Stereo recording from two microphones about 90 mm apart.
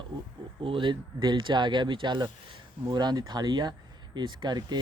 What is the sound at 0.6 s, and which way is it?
Speech, 70° right (ahead or behind).